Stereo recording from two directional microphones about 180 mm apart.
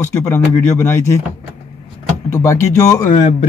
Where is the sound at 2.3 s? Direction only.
15° left (ahead or behind).